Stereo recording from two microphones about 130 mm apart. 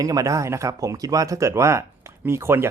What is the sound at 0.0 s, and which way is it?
Speech, 25° right (ahead or behind).